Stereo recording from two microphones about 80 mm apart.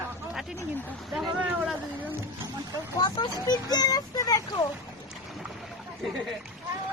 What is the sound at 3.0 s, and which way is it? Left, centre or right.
Speech, left.